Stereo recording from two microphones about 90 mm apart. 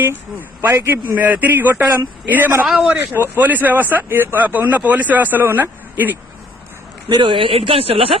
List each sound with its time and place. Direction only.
0.6 s speech: 25° right (ahead or behind)
2.6 s speech: 5° right (ahead or behind)
3.2 s speech: 20° right (ahead or behind)
7.1 s speech: 65° right (ahead or behind); by 8.2 s 85° right